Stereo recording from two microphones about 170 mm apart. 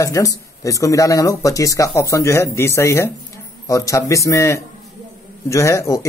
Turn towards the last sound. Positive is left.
turn(degrees=20)  # may be behind; listen again after turning